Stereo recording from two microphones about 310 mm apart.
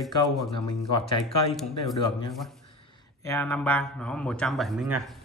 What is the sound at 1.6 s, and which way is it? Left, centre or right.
Speech, centre.